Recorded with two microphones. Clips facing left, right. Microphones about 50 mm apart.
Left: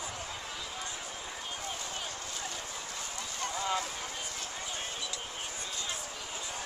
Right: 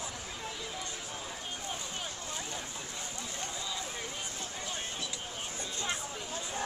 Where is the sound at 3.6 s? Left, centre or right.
Left.